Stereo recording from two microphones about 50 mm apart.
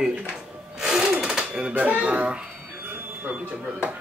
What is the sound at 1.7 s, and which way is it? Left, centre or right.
Speech, right.